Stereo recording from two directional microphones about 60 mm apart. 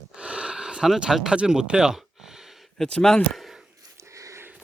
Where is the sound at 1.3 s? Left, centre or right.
Centre.